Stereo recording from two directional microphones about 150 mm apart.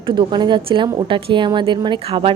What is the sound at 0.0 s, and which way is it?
A woman's voice, 30° right (ahead or behind).